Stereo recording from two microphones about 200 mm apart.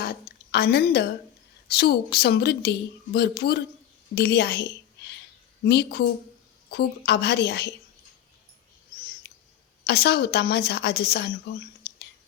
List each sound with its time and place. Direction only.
0.0 s a woman's voice: 55° left (ahead or behind)
5.6 s a woman's voice: 55° left (ahead or behind)
9.2 s cough: 55° left (ahead or behind)
9.8 s a woman's voice: 55° left (ahead or behind)